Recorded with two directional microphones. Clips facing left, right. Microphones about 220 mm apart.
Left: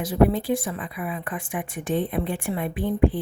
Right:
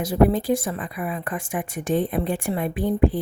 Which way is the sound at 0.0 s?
45° right (ahead or behind).